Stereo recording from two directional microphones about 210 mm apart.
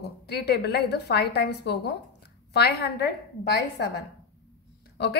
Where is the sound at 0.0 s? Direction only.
50° left (ahead or behind).